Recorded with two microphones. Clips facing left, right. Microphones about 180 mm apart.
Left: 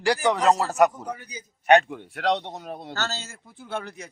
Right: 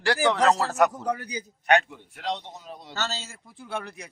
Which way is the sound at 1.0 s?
85° right.